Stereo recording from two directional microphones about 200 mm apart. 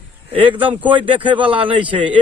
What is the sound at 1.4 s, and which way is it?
Speech, 25° right (ahead or behind).